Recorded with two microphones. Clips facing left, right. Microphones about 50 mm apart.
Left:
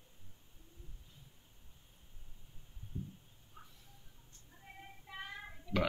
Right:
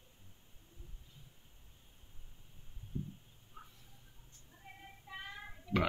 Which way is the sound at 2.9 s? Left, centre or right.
Right.